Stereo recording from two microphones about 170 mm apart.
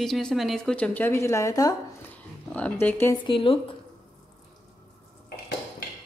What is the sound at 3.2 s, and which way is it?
Speech, 30° left (ahead or behind).